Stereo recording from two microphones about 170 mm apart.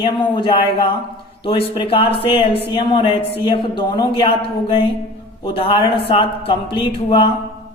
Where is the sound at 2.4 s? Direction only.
70° left (ahead or behind).